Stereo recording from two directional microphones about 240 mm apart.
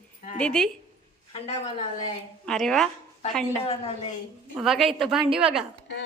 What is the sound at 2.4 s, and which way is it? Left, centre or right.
Speech, centre.